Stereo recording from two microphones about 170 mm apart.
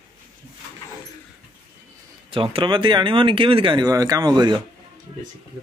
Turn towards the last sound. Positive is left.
turn(degrees=-25)  # may be behind; listen again after turning